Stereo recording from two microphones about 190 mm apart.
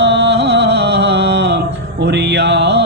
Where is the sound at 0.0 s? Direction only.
65° right (ahead or behind).